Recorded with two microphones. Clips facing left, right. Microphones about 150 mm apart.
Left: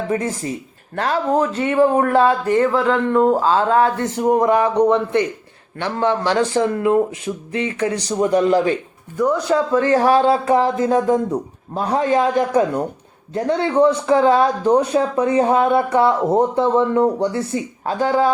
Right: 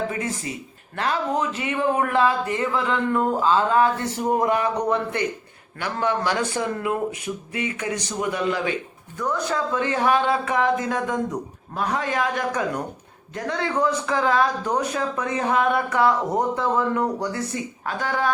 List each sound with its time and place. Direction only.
0.1 s speech: 35° left (ahead or behind)
9.1 s speech: 15° left (ahead or behind)
9.7 s speech: 40° left (ahead or behind)